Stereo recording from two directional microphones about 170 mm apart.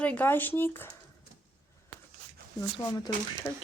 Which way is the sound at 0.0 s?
10° left (ahead or behind).